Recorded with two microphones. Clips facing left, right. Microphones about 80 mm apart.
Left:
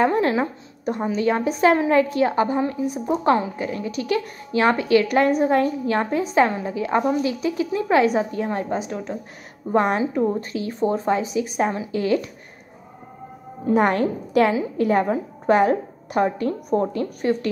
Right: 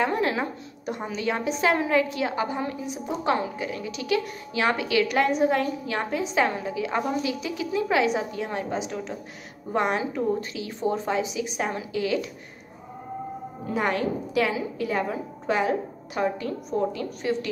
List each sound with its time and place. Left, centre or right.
0.0 s a woman's voice: left
13.7 s a woman's voice: left